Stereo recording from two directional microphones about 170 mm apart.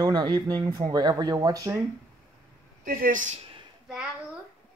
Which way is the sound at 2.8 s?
55° right (ahead or behind).